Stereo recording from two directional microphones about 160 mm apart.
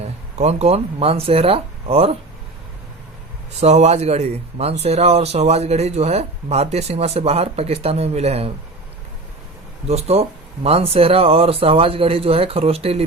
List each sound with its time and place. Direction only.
0.3 s speech: 45° right (ahead or behind)
3.6 s speech: 45° right (ahead or behind)
9.8 s speech: 40° right (ahead or behind)